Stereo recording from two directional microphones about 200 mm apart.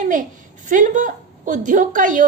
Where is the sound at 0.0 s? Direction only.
40° right (ahead or behind).